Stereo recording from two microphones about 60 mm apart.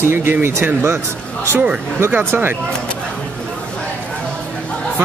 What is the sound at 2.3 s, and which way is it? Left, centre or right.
Speech, right.